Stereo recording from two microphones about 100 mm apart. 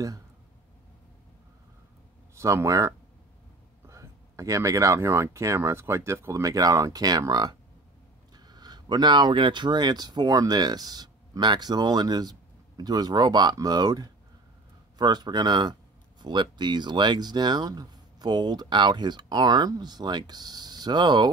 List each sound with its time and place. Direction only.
2.3 s speech: 30° right (ahead or behind); by 21.3 s 45° right (ahead or behind)